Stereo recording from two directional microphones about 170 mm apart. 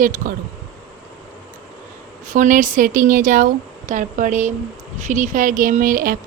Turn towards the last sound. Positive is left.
turn(degrees=-55)  # may be behind; listen again after turning